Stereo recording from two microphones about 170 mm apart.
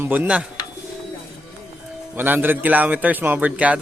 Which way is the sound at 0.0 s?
10° right (ahead or behind).